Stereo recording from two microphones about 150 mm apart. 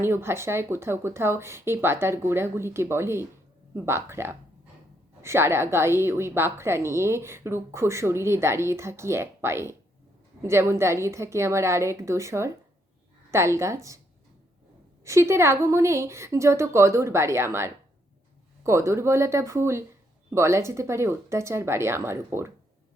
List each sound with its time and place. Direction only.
0.0 s a woman's voice: 15° right (ahead or behind)
15.0 s a woman's voice: 20° right (ahead or behind)